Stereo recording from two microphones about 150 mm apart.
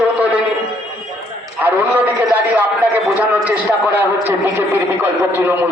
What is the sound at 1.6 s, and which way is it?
A man's voice, 10° right (ahead or behind).